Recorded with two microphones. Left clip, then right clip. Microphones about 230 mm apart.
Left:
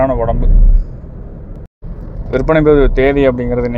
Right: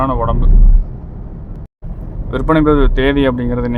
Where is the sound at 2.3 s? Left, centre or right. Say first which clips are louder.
Left 3 dB; centre.